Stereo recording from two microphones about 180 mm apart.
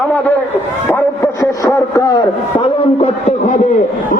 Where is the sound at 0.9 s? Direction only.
15° left (ahead or behind).